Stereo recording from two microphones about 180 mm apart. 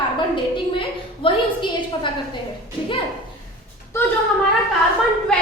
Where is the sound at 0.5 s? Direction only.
30° left (ahead or behind).